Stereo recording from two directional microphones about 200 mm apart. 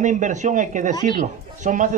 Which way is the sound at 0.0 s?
40° right (ahead or behind).